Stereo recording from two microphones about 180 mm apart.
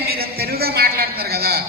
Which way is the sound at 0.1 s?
60° right (ahead or behind).